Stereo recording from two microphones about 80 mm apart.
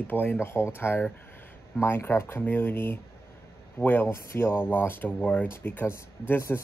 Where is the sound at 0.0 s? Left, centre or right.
Left.